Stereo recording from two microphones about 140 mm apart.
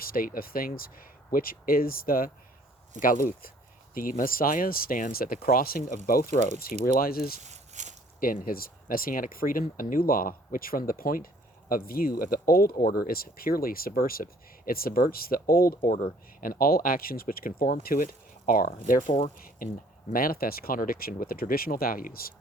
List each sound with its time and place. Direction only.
0.0 s speech: 90° left
3.0 s speech: 80° left
7.4 s a sound: 55° right (ahead or behind)
8.2 s speech: 90° left
19.4 s a sound: 90° left
20.1 s speech: 90° left